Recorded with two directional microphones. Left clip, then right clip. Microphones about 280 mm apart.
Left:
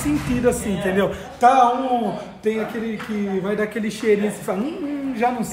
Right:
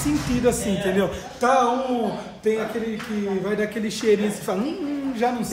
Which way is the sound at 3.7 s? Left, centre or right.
Centre.